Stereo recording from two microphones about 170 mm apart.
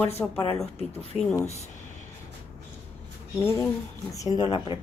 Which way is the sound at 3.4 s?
15° left (ahead or behind).